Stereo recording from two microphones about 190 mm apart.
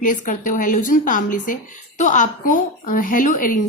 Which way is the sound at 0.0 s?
45° left (ahead or behind).